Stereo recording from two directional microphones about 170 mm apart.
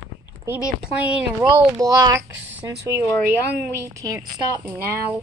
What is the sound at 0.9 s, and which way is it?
Speech, 5° right (ahead or behind).